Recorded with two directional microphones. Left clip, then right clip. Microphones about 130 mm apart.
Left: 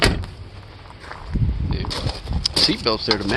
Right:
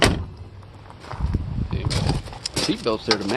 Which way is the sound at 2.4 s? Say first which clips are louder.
Left 5 dB; 20° left (ahead or behind).